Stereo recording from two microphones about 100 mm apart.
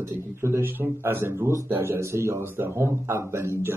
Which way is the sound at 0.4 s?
25° right (ahead or behind).